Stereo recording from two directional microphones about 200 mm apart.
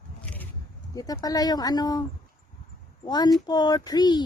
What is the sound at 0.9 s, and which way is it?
Speech, 20° left (ahead or behind).